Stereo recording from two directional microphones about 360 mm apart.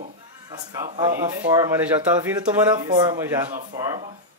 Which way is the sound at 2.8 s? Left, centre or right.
Centre.